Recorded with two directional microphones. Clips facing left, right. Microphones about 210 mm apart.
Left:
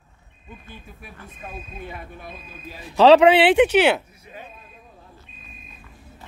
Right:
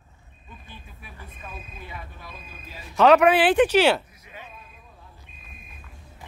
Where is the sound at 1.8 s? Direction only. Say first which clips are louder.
Left 5 dB; 50° left (ahead or behind).